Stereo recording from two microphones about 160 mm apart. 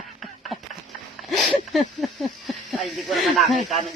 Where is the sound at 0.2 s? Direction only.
Centre (ahead or behind).